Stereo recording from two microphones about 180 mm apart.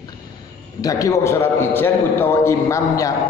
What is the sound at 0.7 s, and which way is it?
A man's voice, 20° left (ahead or behind).